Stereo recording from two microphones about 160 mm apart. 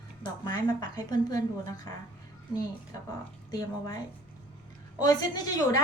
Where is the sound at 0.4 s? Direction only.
25° left (ahead or behind).